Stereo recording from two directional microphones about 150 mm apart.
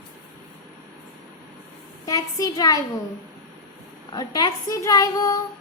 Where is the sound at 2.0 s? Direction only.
25° left (ahead or behind).